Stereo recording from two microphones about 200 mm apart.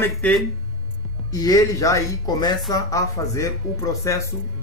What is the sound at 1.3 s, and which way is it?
Speech, 20° left (ahead or behind).